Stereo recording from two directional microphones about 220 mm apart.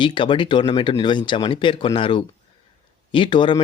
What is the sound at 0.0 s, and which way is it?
Speech, 20° left (ahead or behind).